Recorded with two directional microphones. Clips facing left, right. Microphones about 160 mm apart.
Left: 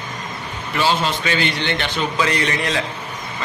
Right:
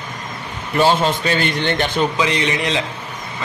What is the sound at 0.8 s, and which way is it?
A man's voice, 45° right (ahead or behind).